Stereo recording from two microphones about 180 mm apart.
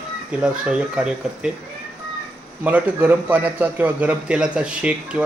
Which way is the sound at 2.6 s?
10° right (ahead or behind).